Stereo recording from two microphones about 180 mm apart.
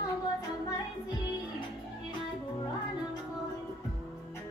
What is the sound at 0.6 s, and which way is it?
Music, 20° left (ahead or behind).